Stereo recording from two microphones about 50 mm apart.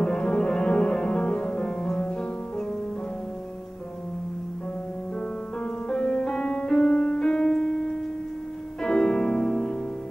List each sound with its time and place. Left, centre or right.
0.0 s music: centre
5.9 s music: centre
8.8 s piano: centre